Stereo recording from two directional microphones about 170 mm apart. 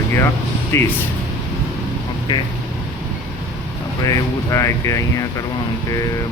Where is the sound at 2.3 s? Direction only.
25° left (ahead or behind).